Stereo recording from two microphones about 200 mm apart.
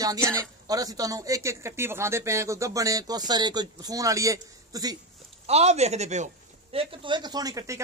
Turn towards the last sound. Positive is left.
turn(degrees=-15)  # may be behind; listen again after turning